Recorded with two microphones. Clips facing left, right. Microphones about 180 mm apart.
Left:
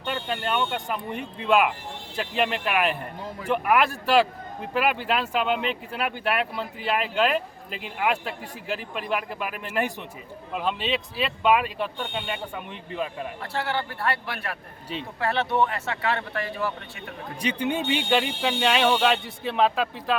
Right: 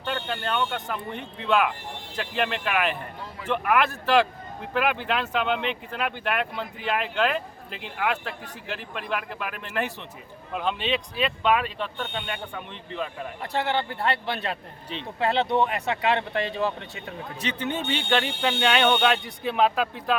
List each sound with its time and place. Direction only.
0.0 s speech: 10° left (ahead or behind)
13.4 s speech: 20° right (ahead or behind)
17.4 s speech: 10° left (ahead or behind)